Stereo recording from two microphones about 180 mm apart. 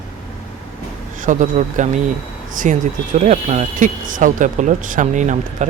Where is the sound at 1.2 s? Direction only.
45° right (ahead or behind).